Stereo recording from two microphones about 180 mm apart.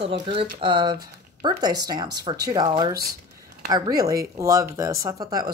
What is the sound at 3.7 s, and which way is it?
Speech, 20° right (ahead or behind).